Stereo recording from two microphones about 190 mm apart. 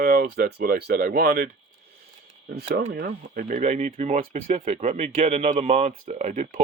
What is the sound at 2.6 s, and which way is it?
Speech, 60° right (ahead or behind).